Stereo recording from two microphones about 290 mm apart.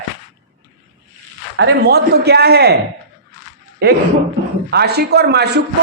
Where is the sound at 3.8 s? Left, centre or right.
Right.